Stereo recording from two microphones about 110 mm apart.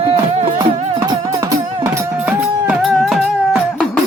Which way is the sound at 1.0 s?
40° right (ahead or behind).